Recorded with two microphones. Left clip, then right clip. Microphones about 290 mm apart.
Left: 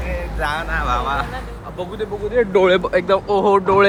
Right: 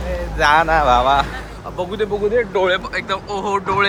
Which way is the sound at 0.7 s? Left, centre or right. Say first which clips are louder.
Right 7 dB; centre.